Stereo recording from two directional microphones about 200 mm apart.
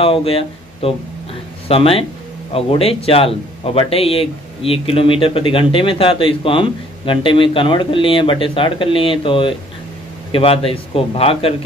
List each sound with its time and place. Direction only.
0.0 s speech: 30° left (ahead or behind)